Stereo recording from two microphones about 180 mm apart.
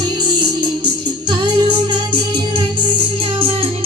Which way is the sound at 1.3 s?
25° right (ahead or behind).